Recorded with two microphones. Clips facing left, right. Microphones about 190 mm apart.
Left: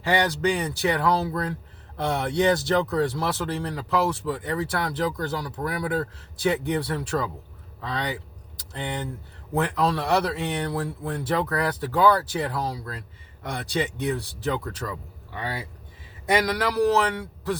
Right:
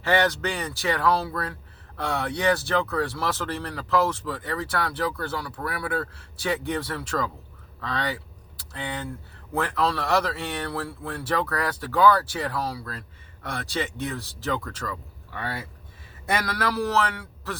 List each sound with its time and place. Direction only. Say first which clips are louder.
0.0 s speech: even; 15° left (ahead or behind)